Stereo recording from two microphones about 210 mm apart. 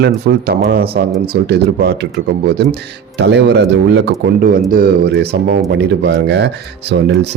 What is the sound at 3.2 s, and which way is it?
Speech, 55° right (ahead or behind).